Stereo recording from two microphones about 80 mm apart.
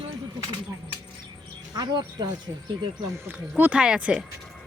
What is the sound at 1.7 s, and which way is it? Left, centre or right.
Speech, right.